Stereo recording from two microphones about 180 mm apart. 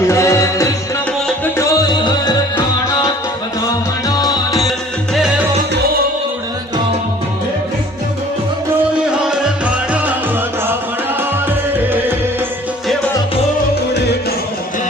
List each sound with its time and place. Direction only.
0.1 s music: 15° left (ahead or behind)
4.1 s music: 20° left (ahead or behind)
5.1 s music: centre (ahead or behind)
9.0 s music: 5° right (ahead or behind)
13.9 s music: 65° left (ahead or behind)